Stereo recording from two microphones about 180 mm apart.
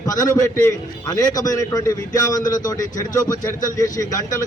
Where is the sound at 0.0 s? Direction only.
20° left (ahead or behind).